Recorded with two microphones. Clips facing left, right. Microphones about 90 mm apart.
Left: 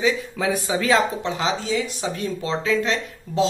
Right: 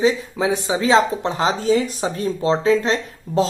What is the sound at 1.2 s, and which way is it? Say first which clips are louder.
A man's voice: right 5 dB; 40° right (ahead or behind).